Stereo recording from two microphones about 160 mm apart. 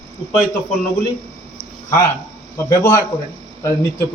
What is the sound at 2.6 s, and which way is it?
Speech, 15° left (ahead or behind).